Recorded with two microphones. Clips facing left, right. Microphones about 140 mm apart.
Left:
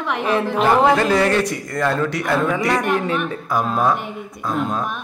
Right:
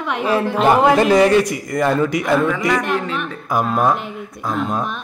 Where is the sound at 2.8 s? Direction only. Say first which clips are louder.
Left 2 dB; 15° left (ahead or behind).